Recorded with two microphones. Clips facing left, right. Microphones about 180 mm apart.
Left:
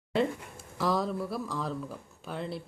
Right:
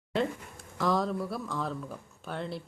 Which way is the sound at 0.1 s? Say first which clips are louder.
Left 2 dB; 5° left (ahead or behind).